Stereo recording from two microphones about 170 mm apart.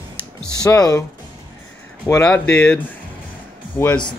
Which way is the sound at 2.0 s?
10° left (ahead or behind).